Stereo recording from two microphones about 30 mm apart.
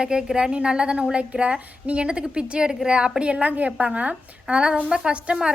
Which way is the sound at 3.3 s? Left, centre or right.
Right.